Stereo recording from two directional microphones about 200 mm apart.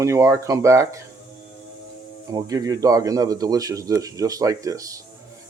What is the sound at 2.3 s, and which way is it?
Speech, 15° right (ahead or behind).